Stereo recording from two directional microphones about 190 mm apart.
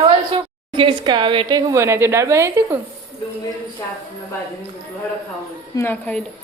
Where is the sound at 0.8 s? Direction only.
25° right (ahead or behind).